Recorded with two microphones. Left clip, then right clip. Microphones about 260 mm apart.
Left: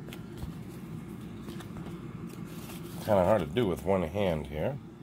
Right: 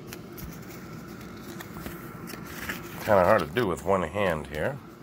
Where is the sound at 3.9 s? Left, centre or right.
Centre.